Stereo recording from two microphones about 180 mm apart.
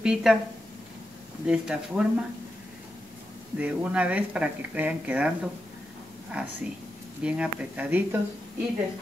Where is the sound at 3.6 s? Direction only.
5° right (ahead or behind).